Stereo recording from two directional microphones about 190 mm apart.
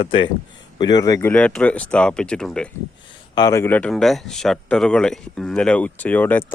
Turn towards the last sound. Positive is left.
turn(degrees=10)  # may be behind; listen again after turning